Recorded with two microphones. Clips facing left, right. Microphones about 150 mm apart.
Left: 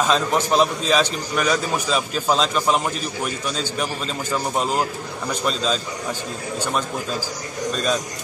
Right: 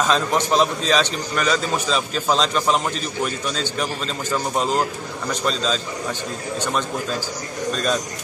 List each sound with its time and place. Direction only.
0.1 s a man's voice: 5° left (ahead or behind)
7.7 s speech: centre (ahead or behind)